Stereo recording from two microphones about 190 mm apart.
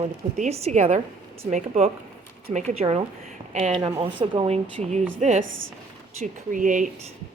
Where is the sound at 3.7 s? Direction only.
25° right (ahead or behind); by 6.9 s 40° right (ahead or behind).